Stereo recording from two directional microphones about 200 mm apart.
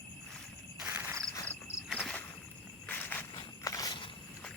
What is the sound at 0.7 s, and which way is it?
Insect, 5° right (ahead or behind).